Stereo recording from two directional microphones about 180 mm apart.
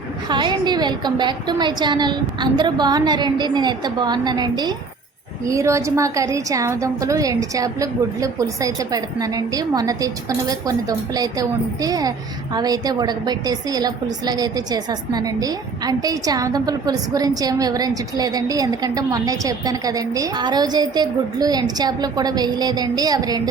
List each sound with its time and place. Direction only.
0.3 s a woman's voice: 25° right (ahead or behind)